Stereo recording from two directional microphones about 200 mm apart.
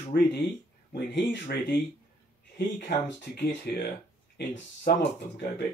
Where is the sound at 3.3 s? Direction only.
55° left (ahead or behind).